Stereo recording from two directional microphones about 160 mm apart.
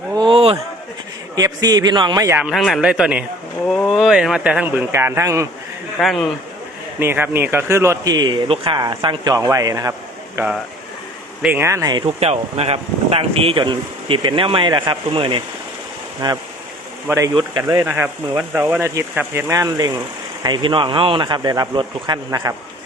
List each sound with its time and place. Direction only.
0.1 s a sound: 30° right (ahead or behind)
1.4 s speech: 25° right (ahead or behind)
2.4 s speech: centre (ahead or behind); by 5.5 s 20° right (ahead or behind)
6.0 s speech: centre (ahead or behind)
7.0 s speech: 15° right (ahead or behind)
11.4 s speech: 15° right (ahead or behind)